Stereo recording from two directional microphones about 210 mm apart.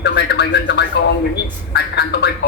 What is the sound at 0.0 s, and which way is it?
Music, 55° left (ahead or behind).